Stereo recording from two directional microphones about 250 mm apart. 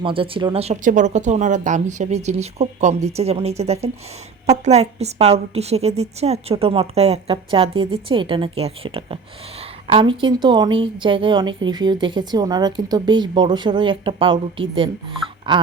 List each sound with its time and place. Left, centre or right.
0.0 s a woman's voice: right